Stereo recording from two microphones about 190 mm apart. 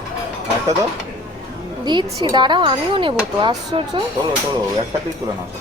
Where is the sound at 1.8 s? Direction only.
20° right (ahead or behind).